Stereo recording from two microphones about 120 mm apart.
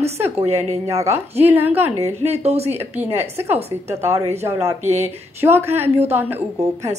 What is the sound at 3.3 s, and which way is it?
A woman's voice, 20° right (ahead or behind).